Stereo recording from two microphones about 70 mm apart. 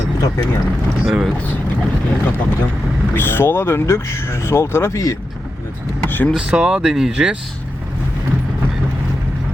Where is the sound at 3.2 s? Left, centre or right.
Left.